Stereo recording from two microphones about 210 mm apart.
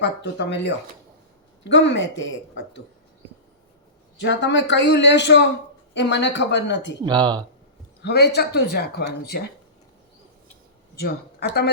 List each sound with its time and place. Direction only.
0.0 s speech: 55° left (ahead or behind)
4.2 s speech: 60° left (ahead or behind)
7.0 s speech: 20° right (ahead or behind)
8.0 s speech: 50° left (ahead or behind)
10.9 s a woman's voice: 50° left (ahead or behind)